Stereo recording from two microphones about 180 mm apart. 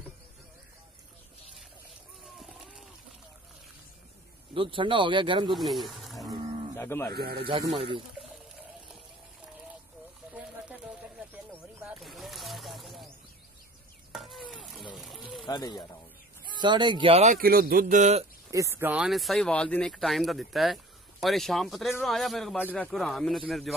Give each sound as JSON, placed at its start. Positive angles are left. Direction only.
{"t": 2.3, "sound": "a sound", "side_deg": 0}
{"t": 4.6, "sound": "speech", "side_deg": -30}
{"t": 5.5, "sound": "speech", "side_deg": 0}
{"t": 6.8, "sound": "speech", "side_deg": 15}
{"t": 7.3, "sound": "speech", "side_deg": -30}
{"t": 10.3, "sound": "a sound", "side_deg": -5}
{"t": 14.1, "sound": "stir", "side_deg": 0}
{"t": 15.4, "sound": "speech", "side_deg": 25}
{"t": 16.6, "sound": "speech", "side_deg": -25}
{"t": 17.4, "sound": "speech", "side_deg": -55}
{"t": 18.5, "sound": "speech", "side_deg": -15}